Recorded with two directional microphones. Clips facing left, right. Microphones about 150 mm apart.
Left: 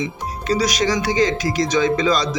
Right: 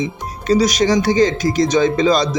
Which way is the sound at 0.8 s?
25° right (ahead or behind).